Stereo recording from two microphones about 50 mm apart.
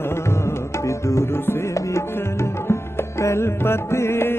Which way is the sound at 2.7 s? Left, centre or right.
Left.